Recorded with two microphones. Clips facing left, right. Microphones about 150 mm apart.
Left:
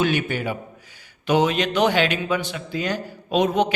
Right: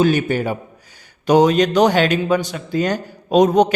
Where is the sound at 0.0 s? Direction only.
40° right (ahead or behind).